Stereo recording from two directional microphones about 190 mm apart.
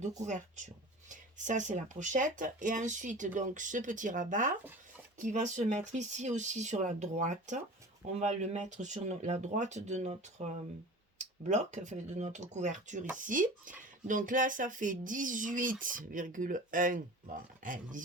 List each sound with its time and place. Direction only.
0.3 s speech: 40° right (ahead or behind)
11.4 s speech: 40° right (ahead or behind)